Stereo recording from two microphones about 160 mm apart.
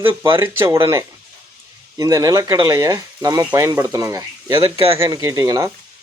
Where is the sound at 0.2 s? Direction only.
15° right (ahead or behind).